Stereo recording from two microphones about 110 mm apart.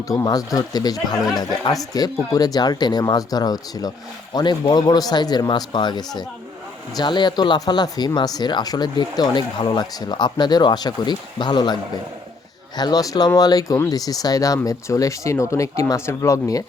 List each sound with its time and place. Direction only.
0.1 s speech: 35° left (ahead or behind)